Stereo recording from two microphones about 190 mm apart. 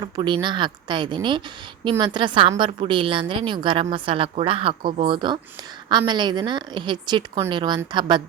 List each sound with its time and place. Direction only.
0.0 s a woman's voice: 25° right (ahead or behind)